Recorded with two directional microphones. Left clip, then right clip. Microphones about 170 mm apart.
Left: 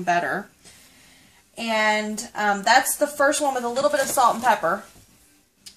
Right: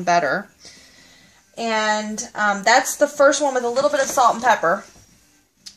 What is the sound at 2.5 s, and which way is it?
Speech, 20° right (ahead or behind).